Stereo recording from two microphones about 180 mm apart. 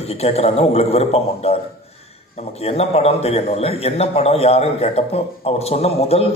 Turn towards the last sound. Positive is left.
turn(degrees=35)  # may be behind; listen again after turning